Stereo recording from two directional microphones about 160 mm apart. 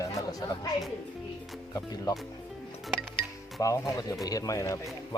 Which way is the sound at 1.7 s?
25° left (ahead or behind).